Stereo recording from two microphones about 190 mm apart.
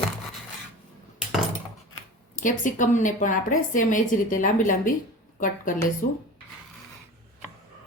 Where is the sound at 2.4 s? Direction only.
40° left (ahead or behind).